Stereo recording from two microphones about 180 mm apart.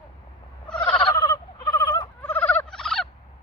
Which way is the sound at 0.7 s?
5° left (ahead or behind).